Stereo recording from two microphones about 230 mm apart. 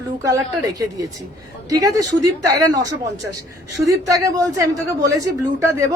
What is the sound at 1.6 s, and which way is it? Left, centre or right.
A woman's voice, centre.